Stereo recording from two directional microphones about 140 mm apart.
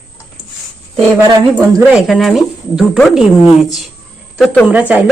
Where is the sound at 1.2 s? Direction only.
25° right (ahead or behind).